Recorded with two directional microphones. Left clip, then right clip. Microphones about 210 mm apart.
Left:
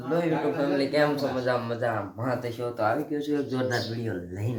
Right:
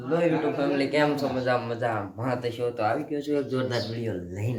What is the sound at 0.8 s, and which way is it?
Speech, centre (ahead or behind).